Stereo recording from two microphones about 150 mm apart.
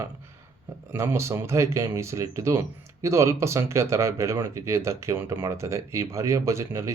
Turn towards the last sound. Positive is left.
turn(degrees=-20)  # may be behind; listen again after turning